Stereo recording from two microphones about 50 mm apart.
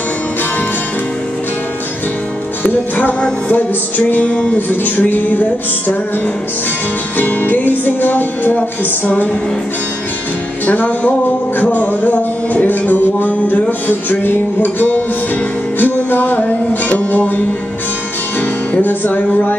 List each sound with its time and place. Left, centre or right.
2.6 s music: left
4.6 s music: left
10.7 s music: left
18.7 s music: left